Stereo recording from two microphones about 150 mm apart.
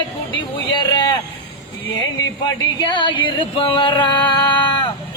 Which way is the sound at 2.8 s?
35° left (ahead or behind).